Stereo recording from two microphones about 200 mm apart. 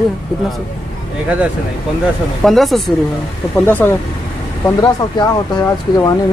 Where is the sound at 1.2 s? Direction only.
5° right (ahead or behind); by 6.1 s 20° left (ahead or behind).